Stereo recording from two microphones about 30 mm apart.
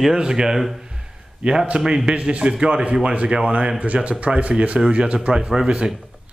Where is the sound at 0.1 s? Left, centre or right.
Right.